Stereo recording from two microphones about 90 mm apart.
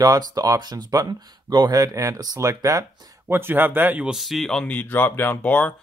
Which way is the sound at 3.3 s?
25° right (ahead or behind).